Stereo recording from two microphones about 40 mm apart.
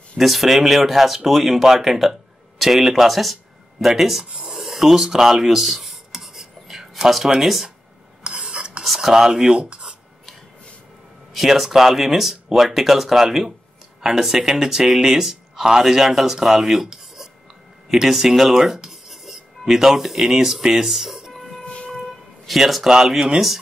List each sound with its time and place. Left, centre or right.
0.2 s speech: centre
4.2 s speech: right
4.6 s rub: centre
7.3 s speech: centre
8.2 s a sound: right
8.8 s speech: centre
9.7 s a sound: right
11.3 s speech: centre
17.8 s writing: centre
19.6 s speech: centre
21.5 s wind instrument: left
22.5 s speech: centre